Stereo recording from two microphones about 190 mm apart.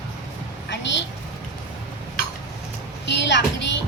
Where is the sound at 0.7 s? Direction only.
70° left (ahead or behind).